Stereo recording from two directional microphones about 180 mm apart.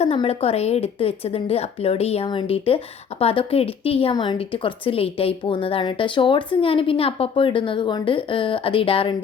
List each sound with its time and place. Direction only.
0.0 s a woman's voice: 35° left (ahead or behind)